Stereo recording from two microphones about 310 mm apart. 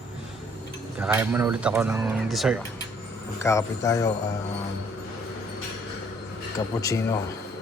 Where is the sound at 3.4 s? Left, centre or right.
Centre.